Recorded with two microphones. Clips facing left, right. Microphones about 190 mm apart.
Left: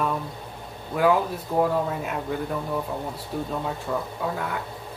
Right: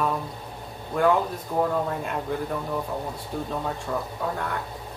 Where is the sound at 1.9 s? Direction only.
5° left (ahead or behind).